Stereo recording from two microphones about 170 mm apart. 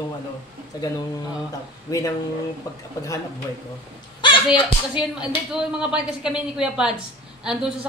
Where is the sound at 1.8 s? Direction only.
20° left (ahead or behind).